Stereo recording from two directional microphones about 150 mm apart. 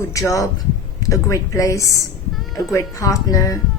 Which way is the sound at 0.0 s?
20° left (ahead or behind).